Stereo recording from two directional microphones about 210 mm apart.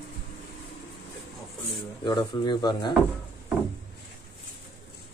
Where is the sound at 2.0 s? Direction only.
20° left (ahead or behind).